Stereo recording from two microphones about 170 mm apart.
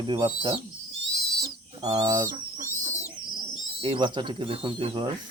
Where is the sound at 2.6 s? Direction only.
50° right (ahead or behind).